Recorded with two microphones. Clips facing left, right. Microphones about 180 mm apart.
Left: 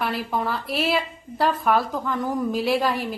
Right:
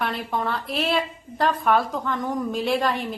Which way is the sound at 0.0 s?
5° left (ahead or behind).